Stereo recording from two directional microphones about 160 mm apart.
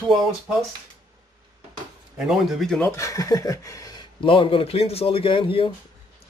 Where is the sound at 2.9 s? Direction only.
20° left (ahead or behind); by 5.7 s 35° left (ahead or behind).